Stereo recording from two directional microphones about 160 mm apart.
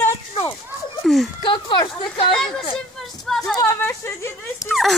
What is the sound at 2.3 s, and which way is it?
Speech, 5° left (ahead or behind).